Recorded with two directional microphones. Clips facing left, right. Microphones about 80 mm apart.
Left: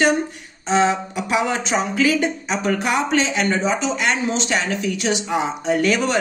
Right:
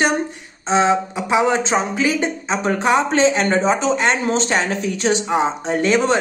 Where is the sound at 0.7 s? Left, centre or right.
Right.